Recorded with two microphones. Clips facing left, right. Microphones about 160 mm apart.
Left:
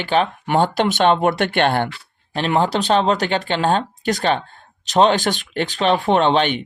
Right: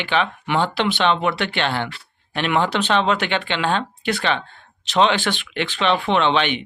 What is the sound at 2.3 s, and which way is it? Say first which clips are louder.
Speech: left 2 dB; 35° left (ahead or behind).